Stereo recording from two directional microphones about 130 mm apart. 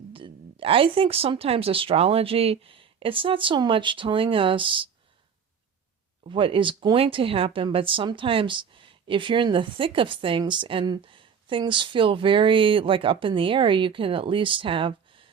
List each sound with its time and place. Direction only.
0.1 s speech: 45° right (ahead or behind)
6.2 s speech: 40° right (ahead or behind)